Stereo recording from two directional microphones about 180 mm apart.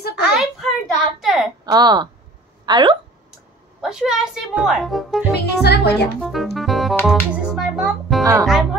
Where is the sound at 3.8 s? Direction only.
5° right (ahead or behind).